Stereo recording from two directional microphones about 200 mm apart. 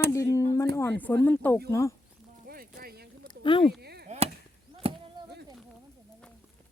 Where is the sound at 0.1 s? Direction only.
15° left (ahead or behind).